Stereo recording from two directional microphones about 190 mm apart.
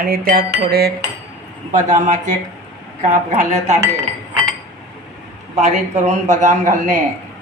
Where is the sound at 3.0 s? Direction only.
40° right (ahead or behind).